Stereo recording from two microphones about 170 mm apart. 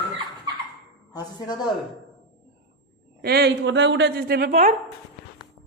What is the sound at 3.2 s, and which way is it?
A man's voice, 70° right (ahead or behind).